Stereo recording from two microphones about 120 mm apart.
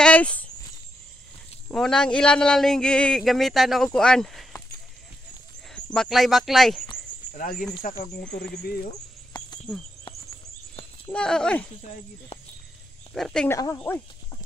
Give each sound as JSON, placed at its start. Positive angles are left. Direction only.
{"t": 0.0, "sound": "a sound", "side_deg": 10}
{"t": 1.7, "sound": "speech", "side_deg": 5}
{"t": 5.9, "sound": "speech", "side_deg": 0}
{"t": 11.1, "sound": "speech", "side_deg": 5}
{"t": 13.1, "sound": "speech", "side_deg": 5}
{"t": 13.5, "sound": "speech", "side_deg": 25}
{"t": 13.7, "sound": "speech", "side_deg": 15}